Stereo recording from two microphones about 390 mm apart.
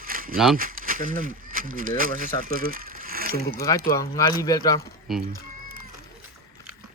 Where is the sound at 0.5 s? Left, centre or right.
Right.